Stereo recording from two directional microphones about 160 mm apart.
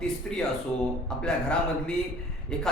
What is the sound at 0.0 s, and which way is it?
Speech, 5° left (ahead or behind).